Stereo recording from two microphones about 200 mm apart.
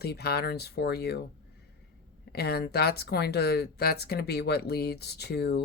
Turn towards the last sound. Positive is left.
turn(degrees=55)  # may be behind; listen again after turning